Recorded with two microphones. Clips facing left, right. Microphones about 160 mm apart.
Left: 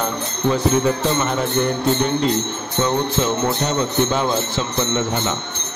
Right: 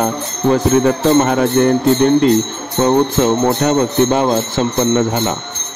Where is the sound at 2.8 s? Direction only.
55° right (ahead or behind).